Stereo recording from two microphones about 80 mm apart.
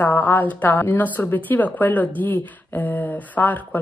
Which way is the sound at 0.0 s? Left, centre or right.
Left.